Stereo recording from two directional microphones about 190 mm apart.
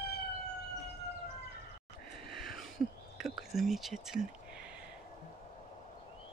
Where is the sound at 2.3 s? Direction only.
Centre (ahead or behind).